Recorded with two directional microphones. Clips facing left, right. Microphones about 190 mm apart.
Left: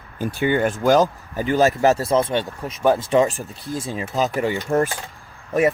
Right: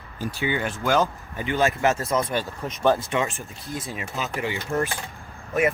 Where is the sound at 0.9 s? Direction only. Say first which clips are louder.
Left 5 dB; 35° left (ahead or behind).